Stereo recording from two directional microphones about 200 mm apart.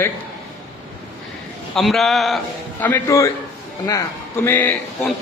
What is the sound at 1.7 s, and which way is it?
A man's voice, centre (ahead or behind).